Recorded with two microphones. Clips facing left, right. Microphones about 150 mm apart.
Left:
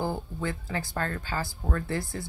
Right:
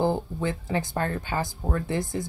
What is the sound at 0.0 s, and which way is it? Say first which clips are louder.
Speech: right 6 dB; 20° right (ahead or behind).